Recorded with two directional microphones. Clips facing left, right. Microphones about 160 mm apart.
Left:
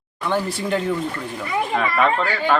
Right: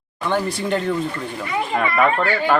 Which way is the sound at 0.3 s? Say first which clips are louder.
Right 1 dB; centre (ahead or behind).